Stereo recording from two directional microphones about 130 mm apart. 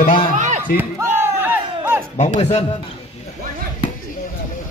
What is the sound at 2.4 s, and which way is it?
Speech, 60° left (ahead or behind).